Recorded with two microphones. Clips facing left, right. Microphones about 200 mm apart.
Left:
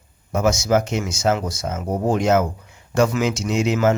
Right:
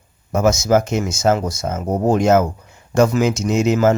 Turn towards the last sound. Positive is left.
turn(degrees=-40)  # may be behind; listen again after turning